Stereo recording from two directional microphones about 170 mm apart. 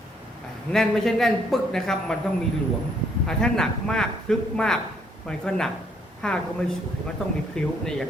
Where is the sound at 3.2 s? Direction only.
5° left (ahead or behind).